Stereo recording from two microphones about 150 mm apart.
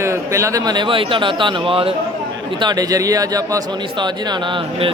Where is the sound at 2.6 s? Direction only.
25° right (ahead or behind).